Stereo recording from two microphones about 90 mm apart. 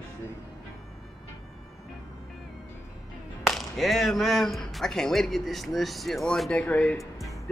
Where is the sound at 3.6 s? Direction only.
Centre (ahead or behind); by 6.9 s 15° left (ahead or behind).